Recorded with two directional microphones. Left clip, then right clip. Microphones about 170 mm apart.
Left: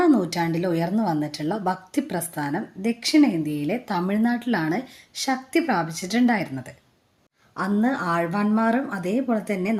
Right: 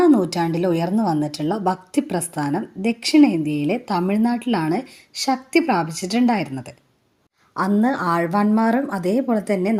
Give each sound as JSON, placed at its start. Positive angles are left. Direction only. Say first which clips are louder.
{"t": 0.0, "sound": "a woman's voice", "louder": "right 4 dB", "side_deg": -20}